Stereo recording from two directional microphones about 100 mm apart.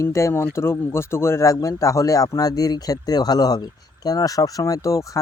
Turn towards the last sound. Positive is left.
turn(degrees=35)  # may be behind; listen again after turning